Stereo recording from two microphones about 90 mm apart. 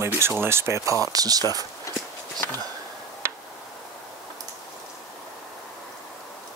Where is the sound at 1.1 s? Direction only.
45° right (ahead or behind).